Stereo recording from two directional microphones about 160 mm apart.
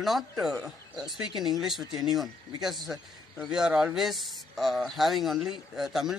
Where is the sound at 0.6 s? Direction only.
25° right (ahead or behind).